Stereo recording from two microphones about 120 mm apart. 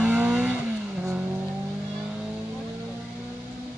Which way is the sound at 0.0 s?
10° right (ahead or behind).